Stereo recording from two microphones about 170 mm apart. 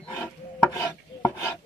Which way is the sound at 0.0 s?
10° left (ahead or behind).